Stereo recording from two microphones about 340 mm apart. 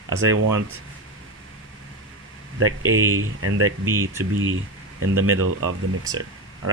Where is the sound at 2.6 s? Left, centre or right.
Right.